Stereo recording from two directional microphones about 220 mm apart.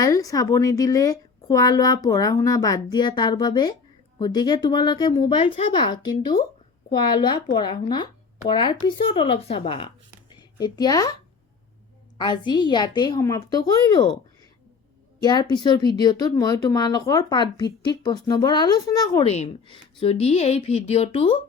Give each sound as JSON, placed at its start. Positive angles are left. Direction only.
{"t": 0.0, "sound": "a woman's voice", "side_deg": 15}
{"t": 15.2, "sound": "speech", "side_deg": 20}
{"t": 19.2, "sound": "speech", "side_deg": 30}